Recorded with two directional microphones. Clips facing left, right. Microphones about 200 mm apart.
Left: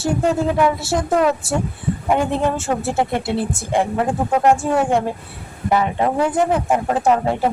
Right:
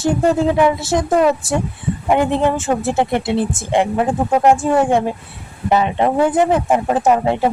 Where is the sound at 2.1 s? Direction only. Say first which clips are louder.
Right 3 dB; 20° right (ahead or behind).